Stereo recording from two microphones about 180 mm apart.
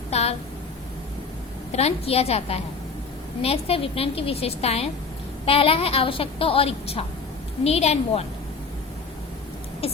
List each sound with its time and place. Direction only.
0.1 s a sound: 35° left (ahead or behind)
1.7 s a woman's voice: 35° left (ahead or behind)
9.8 s a woman's voice: 30° left (ahead or behind)